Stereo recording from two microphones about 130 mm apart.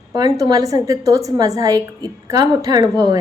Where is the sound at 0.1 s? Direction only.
30° right (ahead or behind).